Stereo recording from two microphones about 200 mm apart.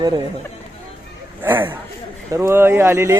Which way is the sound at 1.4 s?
10° right (ahead or behind).